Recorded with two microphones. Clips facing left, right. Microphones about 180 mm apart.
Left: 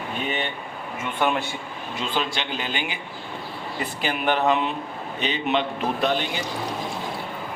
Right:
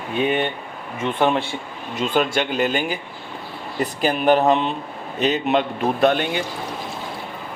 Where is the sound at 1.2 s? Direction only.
30° right (ahead or behind).